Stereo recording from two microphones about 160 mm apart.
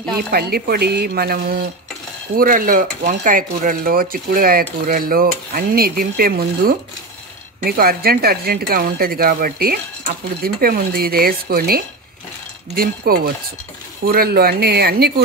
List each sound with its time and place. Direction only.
0.3 s speech: 75° right (ahead or behind)
2.3 s speech: 60° right (ahead or behind); by 15.2 s 85° right